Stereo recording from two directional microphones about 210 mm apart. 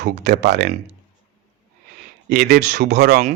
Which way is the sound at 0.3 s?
55° right (ahead or behind).